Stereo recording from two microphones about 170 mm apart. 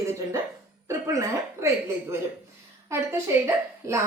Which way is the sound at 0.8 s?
15° right (ahead or behind).